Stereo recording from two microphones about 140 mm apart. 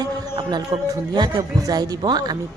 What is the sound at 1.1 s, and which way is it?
Speech, 30° right (ahead or behind).